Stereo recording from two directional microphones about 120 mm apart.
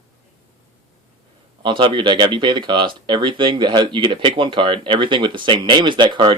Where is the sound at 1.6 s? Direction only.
45° right (ahead or behind).